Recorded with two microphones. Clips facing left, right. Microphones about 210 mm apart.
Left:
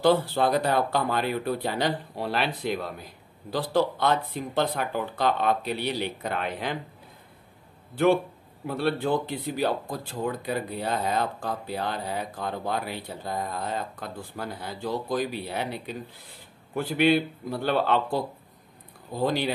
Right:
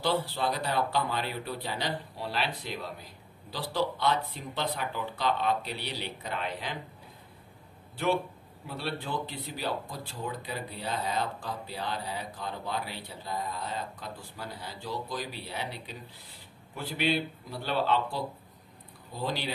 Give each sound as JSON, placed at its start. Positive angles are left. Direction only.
{"t": 0.0, "sound": "speech", "side_deg": 50}
{"t": 7.9, "sound": "a man's voice", "side_deg": 55}